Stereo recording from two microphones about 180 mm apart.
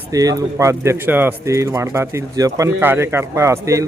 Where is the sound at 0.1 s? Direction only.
20° right (ahead or behind).